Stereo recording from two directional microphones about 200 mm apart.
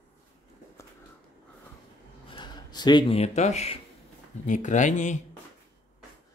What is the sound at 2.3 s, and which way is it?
Speech, 20° left (ahead or behind).